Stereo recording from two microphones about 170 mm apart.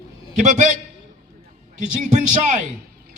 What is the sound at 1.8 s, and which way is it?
Speech, 45° right (ahead or behind).